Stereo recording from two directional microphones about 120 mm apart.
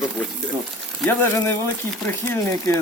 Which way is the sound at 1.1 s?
15° left (ahead or behind).